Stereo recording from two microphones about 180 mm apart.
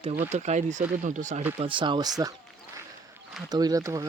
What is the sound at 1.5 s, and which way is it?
Speech, 30° right (ahead or behind).